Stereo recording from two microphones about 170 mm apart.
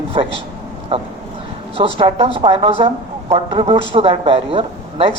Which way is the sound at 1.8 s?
35° right (ahead or behind).